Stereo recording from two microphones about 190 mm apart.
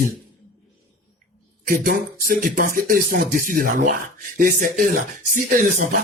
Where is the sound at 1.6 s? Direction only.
50° right (ahead or behind).